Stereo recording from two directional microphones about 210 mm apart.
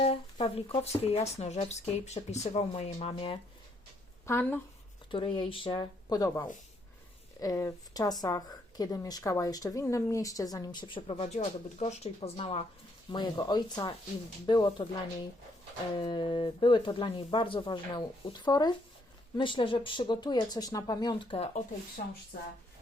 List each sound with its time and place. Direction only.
0.0 s speech: 25° left (ahead or behind)
4.3 s speech: 10° left (ahead or behind)
5.1 s speech: 25° left (ahead or behind)
16.0 s speech: 25° left (ahead or behind)
22.0 s speech: 40° left (ahead or behind)